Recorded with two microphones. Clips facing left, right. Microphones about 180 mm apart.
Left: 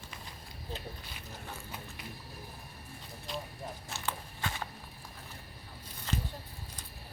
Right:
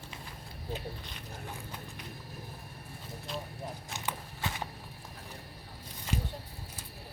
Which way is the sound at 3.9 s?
15° right (ahead or behind).